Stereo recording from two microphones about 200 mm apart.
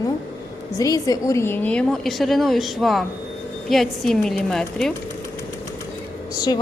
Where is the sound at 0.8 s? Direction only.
15° left (ahead or behind).